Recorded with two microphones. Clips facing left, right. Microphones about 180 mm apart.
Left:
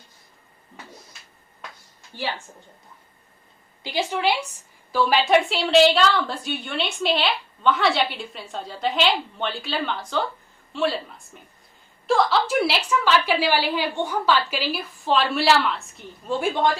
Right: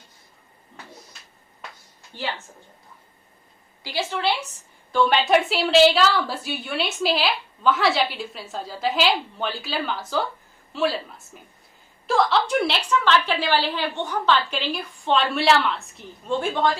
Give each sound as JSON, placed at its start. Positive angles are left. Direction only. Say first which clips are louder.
{"t": 3.8, "sound": "a woman's voice", "louder": "left 2 dB", "side_deg": 15}
{"t": 12.0, "sound": "a woman's voice", "louder": "left 1 dB", "side_deg": 0}